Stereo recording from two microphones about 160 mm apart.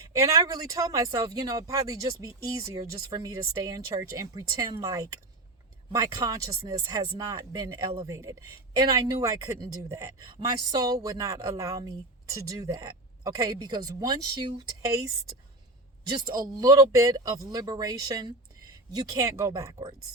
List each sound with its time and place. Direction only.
0.0 s speech: 20° right (ahead or behind)
16.2 s speech: 25° right (ahead or behind)
19.7 s speech: 30° right (ahead or behind)